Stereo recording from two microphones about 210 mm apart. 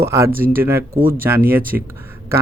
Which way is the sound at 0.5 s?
10° right (ahead or behind).